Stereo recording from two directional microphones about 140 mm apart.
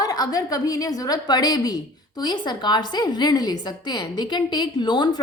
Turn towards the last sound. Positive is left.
turn(degrees=30)  # may be behind; listen again after turning